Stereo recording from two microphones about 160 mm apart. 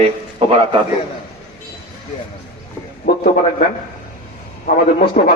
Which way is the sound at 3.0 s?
70° left (ahead or behind).